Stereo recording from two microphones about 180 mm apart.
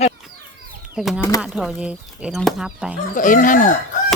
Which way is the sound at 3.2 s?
45° left (ahead or behind).